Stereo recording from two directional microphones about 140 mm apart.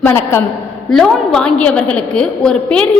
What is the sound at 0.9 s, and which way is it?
A woman's voice, centre (ahead or behind).